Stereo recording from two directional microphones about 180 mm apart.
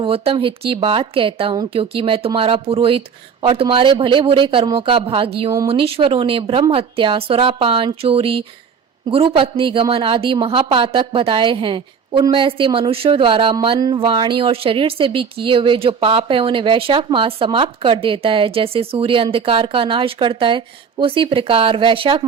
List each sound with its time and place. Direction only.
0.0 s a woman's voice: 30° right (ahead or behind)